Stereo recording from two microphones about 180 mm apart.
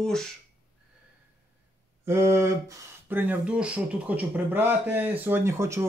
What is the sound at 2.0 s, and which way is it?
Speech, 15° right (ahead or behind).